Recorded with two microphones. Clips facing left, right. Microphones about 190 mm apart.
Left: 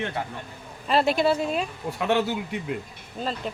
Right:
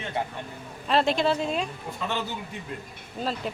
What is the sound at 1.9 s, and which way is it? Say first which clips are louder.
Speech: left 8 dB; 70° left (ahead or behind).